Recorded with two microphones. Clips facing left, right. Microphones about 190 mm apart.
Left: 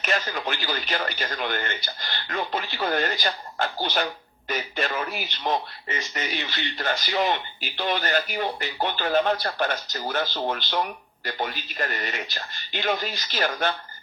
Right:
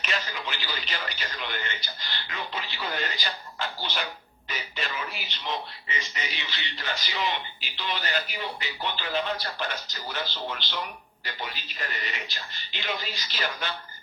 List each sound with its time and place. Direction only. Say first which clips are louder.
0.0 s speech: left 6 dB; 50° left (ahead or behind)